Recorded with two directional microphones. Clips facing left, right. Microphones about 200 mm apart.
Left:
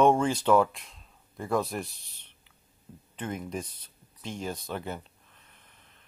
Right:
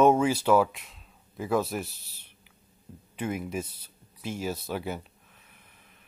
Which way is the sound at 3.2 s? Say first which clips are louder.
Right 3 dB; 10° right (ahead or behind).